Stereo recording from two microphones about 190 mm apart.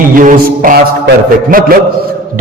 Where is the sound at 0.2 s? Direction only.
45° right (ahead or behind).